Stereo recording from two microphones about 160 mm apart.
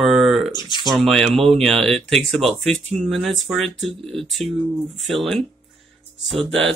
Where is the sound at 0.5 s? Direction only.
30° left (ahead or behind).